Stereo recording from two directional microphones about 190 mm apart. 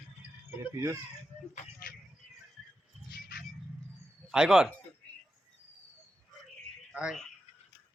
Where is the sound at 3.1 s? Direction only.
55° left (ahead or behind).